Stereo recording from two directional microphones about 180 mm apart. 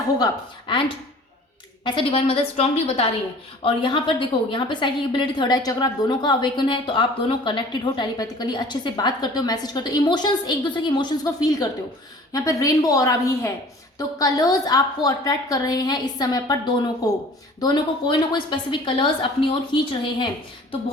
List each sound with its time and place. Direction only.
1.8 s a woman's voice: 30° left (ahead or behind)